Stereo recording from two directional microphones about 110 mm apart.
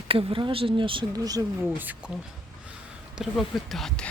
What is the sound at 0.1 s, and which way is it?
Speech, 55° right (ahead or behind).